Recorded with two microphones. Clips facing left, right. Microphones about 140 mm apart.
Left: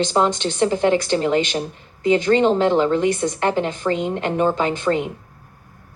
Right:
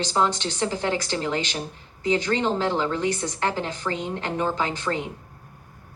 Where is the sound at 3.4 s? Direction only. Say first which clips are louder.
Left 5 dB; 60° left (ahead or behind).